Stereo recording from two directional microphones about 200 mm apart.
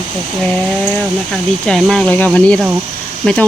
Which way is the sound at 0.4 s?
5° left (ahead or behind).